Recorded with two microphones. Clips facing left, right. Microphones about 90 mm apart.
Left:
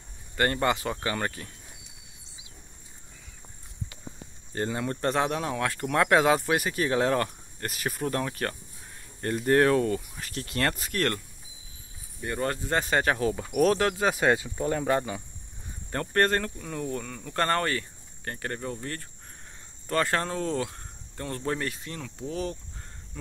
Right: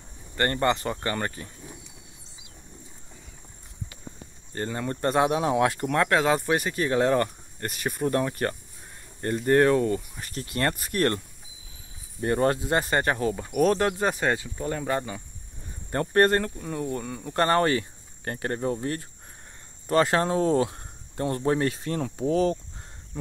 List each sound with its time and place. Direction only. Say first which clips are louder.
0.4 s speech: right 1 dB; 5° left (ahead or behind)
4.6 s speech: even; 5° left (ahead or behind)
5.0 s speech: right 4 dB; 5° right (ahead or behind)
5.4 s speech: right 6 dB; 20° right (ahead or behind)
5.9 s speech: left 5 dB; 5° left (ahead or behind)
12.2 s speech: right 7 dB; 35° right (ahead or behind)
12.5 s speech: right 3 dB; 15° right (ahead or behind)
12.8 s speech: even; centre (ahead or behind)
16.1 s speech: right 4 dB; 10° right (ahead or behind); by 22.6 s 45° right (ahead or behind)